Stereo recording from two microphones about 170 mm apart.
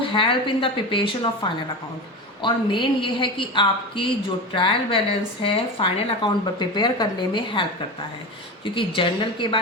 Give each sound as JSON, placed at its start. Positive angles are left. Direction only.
{"t": 0.1, "sound": "a woman's voice", "side_deg": 30}
{"t": 2.4, "sound": "a woman's voice", "side_deg": 30}